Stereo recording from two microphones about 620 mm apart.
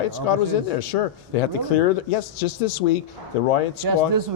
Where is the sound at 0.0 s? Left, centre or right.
Left.